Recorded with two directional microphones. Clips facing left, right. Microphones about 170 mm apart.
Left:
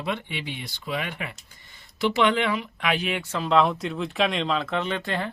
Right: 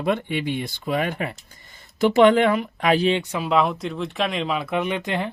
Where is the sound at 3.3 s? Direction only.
10° right (ahead or behind).